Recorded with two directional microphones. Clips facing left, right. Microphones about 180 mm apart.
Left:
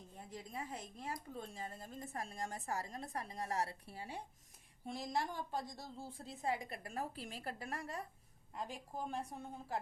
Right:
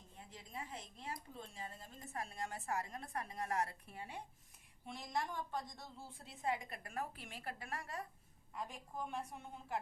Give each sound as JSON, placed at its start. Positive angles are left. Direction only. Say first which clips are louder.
{"t": 0.2, "sound": "a woman's voice", "louder": "left 3 dB", "side_deg": 40}